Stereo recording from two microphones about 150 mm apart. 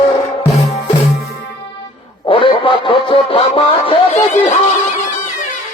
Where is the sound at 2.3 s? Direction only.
35° left (ahead or behind).